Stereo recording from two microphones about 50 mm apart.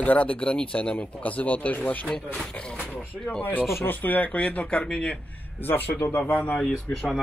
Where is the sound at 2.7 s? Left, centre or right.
Left.